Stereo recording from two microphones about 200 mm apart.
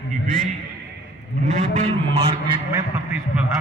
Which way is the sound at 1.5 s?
35° right (ahead or behind).